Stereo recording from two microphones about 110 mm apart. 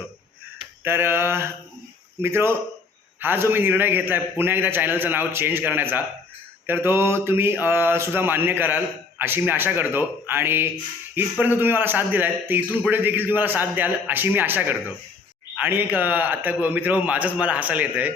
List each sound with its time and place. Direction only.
0.9 s a man's voice: 20° right (ahead or behind)